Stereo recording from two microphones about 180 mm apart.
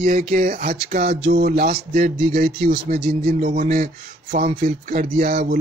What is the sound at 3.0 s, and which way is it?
Speech, 65° right (ahead or behind).